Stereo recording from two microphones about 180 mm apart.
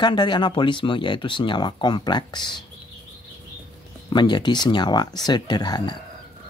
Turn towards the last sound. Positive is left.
turn(degrees=25)  # may be behind; listen again after turning